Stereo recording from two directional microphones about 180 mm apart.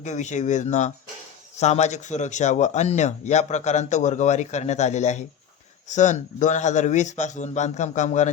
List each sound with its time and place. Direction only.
0.0 s speech: 40° left (ahead or behind)